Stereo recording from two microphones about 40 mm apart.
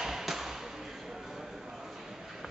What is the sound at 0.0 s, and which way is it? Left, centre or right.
Basketball bounce, centre.